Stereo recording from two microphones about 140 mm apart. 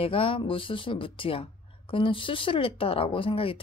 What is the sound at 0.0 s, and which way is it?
Speech, 40° left (ahead or behind).